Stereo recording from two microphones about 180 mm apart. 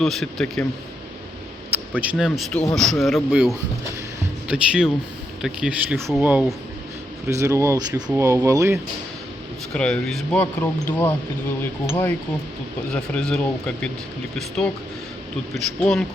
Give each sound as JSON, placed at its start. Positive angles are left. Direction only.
{"t": 0.0, "sound": "speech", "side_deg": 0}
{"t": 2.0, "sound": "speech", "side_deg": -5}
{"t": 7.3, "sound": "speech", "side_deg": -15}
{"t": 9.7, "sound": "speech", "side_deg": 5}
{"t": 15.8, "sound": "speech", "side_deg": 5}